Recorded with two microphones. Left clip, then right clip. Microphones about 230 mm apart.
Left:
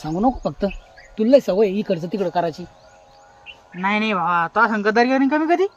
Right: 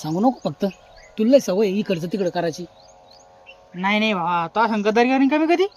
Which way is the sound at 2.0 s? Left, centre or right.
Centre.